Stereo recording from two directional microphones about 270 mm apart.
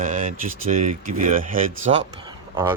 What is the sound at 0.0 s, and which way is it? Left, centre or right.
Speech, right.